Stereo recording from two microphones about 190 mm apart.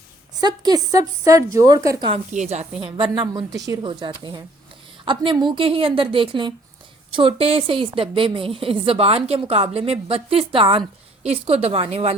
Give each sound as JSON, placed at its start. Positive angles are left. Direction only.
{"t": 0.3, "sound": "a woman's voice", "side_deg": -20}
{"t": 2.0, "sound": "a woman's voice", "side_deg": -35}
{"t": 2.8, "sound": "a woman's voice", "side_deg": -25}